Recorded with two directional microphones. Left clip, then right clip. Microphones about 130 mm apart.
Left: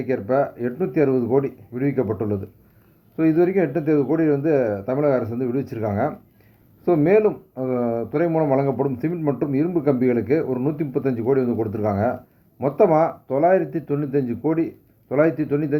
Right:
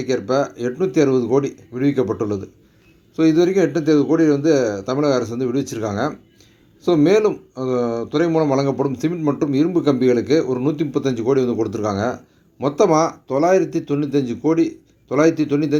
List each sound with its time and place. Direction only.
0.0 s speech: 40° right (ahead or behind)
11.9 s speech: 20° right (ahead or behind)
12.5 s speech: 40° right (ahead or behind)